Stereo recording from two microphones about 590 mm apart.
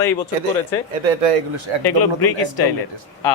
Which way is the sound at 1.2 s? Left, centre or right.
Right.